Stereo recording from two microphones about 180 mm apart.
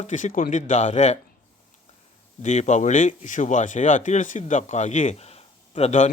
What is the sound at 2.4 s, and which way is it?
Speech, 40° left (ahead or behind).